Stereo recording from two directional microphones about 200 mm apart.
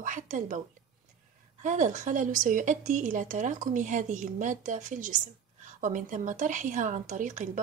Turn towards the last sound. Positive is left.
turn(degrees=-40)  # may be behind; listen again after turning